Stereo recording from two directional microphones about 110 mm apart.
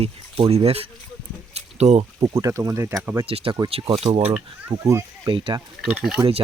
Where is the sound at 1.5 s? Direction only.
85° right.